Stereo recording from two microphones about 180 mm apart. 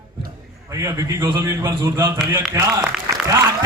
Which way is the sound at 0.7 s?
20° right (ahead or behind).